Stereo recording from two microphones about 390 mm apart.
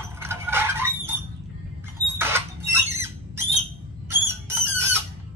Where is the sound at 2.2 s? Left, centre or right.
Centre.